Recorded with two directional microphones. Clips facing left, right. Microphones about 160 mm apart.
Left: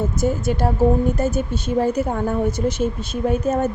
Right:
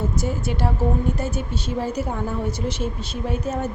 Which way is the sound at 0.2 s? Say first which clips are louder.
Left 5 dB; 45° left (ahead or behind).